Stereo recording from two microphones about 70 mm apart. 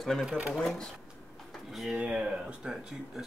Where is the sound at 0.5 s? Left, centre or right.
Centre.